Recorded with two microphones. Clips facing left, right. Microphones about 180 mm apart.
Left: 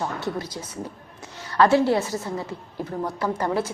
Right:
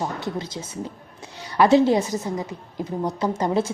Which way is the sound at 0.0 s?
20° right (ahead or behind).